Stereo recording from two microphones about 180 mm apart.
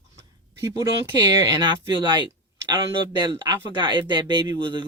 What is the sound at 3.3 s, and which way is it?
Speech, 25° right (ahead or behind).